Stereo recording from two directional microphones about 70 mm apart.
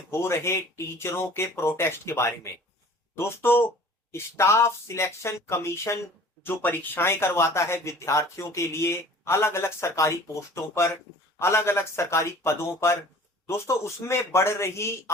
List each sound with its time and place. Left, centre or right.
0.1 s speech: left
6.4 s speech: left